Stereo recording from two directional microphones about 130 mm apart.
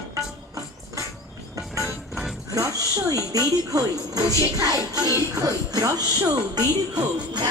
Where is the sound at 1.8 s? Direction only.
Centre (ahead or behind).